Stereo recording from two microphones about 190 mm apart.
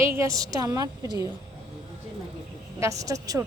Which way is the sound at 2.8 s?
15° right (ahead or behind).